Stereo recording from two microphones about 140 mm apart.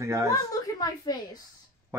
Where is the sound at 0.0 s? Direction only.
20° right (ahead or behind).